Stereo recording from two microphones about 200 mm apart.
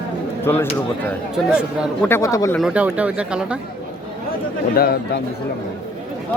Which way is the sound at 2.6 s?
5° right (ahead or behind).